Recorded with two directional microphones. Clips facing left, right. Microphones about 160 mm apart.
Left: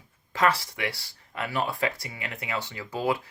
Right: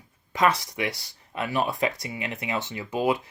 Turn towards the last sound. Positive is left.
turn(degrees=-20)  # may be behind; listen again after turning